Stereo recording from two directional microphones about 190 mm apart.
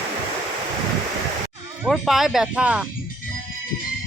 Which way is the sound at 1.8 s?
Centre (ahead or behind).